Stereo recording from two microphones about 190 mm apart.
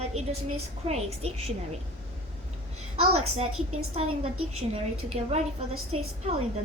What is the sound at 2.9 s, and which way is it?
Speech, 35° right (ahead or behind).